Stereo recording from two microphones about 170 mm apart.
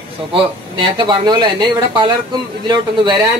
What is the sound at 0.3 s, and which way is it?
A man's voice, 30° right (ahead or behind).